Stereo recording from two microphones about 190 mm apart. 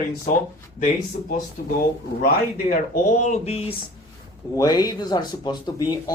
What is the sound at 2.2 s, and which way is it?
Speech, 50° left (ahead or behind).